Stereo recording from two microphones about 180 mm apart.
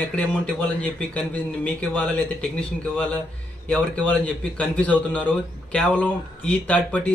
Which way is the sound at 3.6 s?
5° left (ahead or behind).